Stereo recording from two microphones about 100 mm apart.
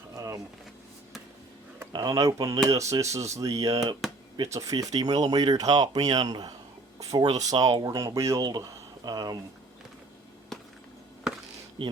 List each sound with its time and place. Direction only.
0.2 s vehicle: 35° right (ahead or behind)
1.9 s speech: 45° right (ahead or behind)
11.8 s speech: 60° right (ahead or behind)